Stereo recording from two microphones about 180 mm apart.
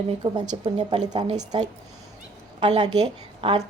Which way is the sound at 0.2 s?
35° right (ahead or behind).